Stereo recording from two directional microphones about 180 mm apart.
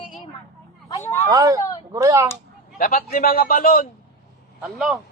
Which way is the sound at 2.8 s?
55° left (ahead or behind).